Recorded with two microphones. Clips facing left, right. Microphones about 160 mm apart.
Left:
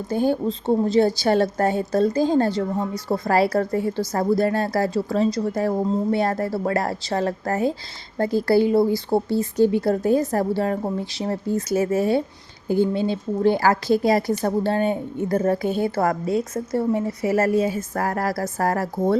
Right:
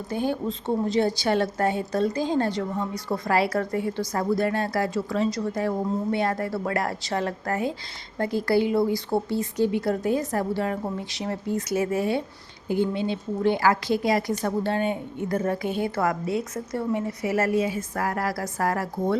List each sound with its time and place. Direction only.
0.1 s speech: 40° left (ahead or behind)